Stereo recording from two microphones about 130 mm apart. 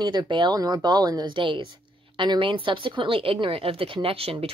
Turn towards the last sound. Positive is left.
turn(degrees=-45)  # may be behind; listen again after turning